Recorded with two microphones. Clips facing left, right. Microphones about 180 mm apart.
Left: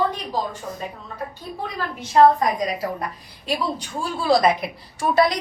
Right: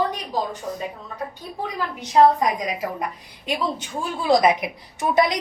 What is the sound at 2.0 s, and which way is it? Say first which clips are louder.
A woman's voice: left 1 dB; 15° right (ahead or behind).